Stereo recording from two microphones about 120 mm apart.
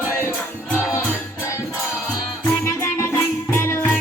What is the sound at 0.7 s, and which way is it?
Music, 20° left (ahead or behind).